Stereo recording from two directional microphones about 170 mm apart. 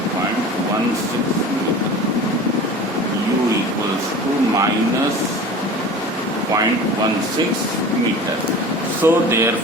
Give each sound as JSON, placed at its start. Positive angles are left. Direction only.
{"t": 9.0, "sound": "speech", "side_deg": -15}